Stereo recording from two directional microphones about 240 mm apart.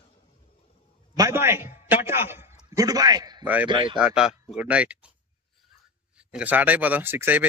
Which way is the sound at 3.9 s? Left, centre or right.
Centre.